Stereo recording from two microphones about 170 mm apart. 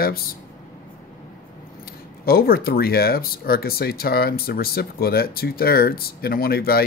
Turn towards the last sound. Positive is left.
turn(degrees=65)  # may be behind; listen again after turning